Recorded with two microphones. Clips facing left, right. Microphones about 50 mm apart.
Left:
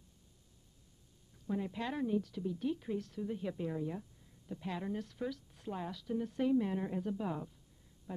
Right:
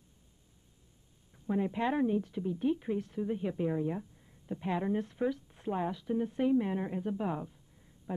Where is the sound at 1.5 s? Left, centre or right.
Right.